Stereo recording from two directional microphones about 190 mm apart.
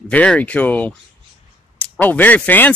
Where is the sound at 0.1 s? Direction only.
5° left (ahead or behind).